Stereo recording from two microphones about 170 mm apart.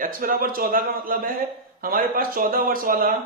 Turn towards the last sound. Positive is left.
turn(degrees=-55)  # may be behind; listen again after turning